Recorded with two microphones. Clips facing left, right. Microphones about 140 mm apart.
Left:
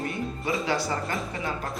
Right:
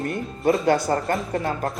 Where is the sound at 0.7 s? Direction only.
50° right (ahead or behind).